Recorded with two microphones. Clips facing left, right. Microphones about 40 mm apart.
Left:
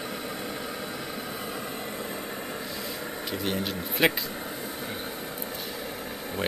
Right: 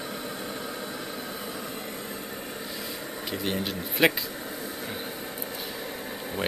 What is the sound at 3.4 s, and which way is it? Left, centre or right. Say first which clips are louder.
Speech: even; centre.